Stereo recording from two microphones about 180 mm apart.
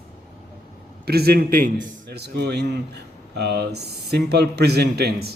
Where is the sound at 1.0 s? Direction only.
60° right (ahead or behind).